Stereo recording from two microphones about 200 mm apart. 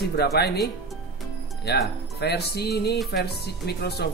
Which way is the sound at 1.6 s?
55° left (ahead or behind).